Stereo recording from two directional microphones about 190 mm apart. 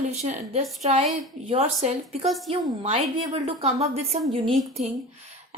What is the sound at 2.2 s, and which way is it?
Speech, centre (ahead or behind).